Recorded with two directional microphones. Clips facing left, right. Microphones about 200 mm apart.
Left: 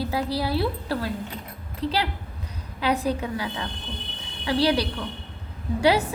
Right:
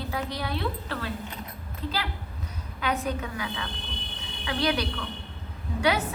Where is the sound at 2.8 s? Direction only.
35° left (ahead or behind).